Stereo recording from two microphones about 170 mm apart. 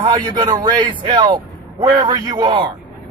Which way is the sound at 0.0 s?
25° right (ahead or behind).